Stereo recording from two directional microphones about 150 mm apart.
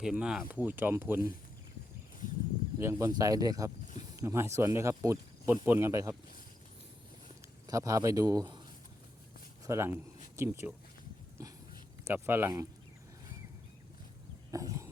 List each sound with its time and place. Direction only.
0.0 s speech: 5° right (ahead or behind)
2.7 s speech: 15° right (ahead or behind)
7.7 s speech: 20° right (ahead or behind)
9.6 s speech: 15° right (ahead or behind)
12.0 s speech: 15° right (ahead or behind)
14.5 s wild animals: 20° right (ahead or behind)